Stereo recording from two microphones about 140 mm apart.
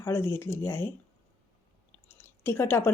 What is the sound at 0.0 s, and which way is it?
Speech, 20° left (ahead or behind).